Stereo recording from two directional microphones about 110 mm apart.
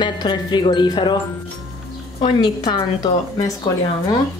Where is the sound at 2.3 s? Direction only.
40° left (ahead or behind).